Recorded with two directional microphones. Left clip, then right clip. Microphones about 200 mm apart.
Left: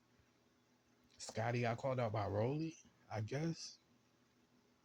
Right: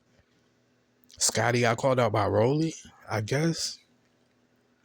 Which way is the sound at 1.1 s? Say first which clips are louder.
Right 17 dB; 45° right (ahead or behind).